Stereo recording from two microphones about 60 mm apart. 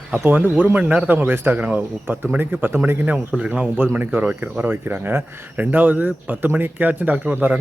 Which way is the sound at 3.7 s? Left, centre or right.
Right.